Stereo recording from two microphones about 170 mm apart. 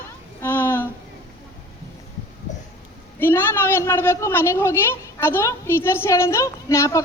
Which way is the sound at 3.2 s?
15° left (ahead or behind).